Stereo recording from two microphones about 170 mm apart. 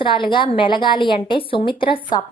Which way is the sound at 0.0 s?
30° left (ahead or behind).